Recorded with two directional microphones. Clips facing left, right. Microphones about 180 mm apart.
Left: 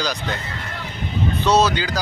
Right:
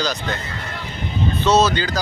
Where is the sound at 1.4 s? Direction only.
15° left (ahead or behind).